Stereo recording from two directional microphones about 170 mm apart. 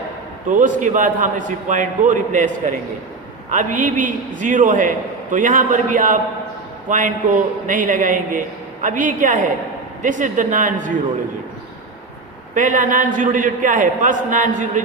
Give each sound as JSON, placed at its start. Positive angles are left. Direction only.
{"t": 0.4, "sound": "a man's voice", "side_deg": -50}
{"t": 12.5, "sound": "a man's voice", "side_deg": -50}